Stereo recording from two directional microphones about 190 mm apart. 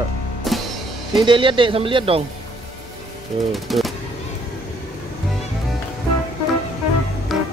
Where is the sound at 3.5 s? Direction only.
Centre (ahead or behind).